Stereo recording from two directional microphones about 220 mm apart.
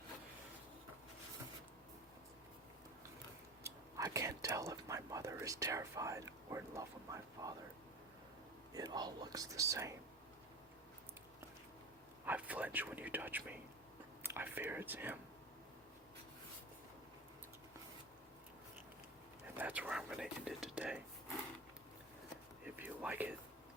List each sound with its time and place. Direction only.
3.6 s speech: 15° right (ahead or behind)
8.7 s speech: 20° right (ahead or behind)
12.2 s a sound: 5° right (ahead or behind)
14.3 s speech: 10° right (ahead or behind)
19.5 s whispering: 5° right (ahead or behind)
22.6 s a sound: 5° right (ahead or behind)